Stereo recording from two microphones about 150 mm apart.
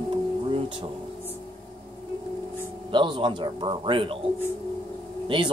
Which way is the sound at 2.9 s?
30° right (ahead or behind).